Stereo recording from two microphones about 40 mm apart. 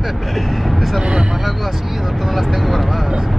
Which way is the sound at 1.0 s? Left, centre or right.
Right.